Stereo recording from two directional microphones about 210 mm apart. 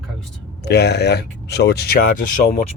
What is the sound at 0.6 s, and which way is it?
Speech, 50° left (ahead or behind).